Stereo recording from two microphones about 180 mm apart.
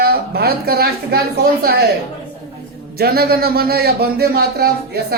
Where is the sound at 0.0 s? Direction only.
60° right (ahead or behind).